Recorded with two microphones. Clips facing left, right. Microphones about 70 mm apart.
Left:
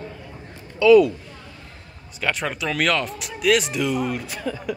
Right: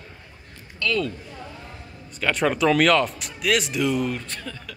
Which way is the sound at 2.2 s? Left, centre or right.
Centre.